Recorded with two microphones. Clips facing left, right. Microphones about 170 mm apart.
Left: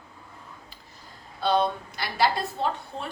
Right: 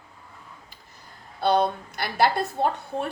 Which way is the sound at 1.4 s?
55° right (ahead or behind).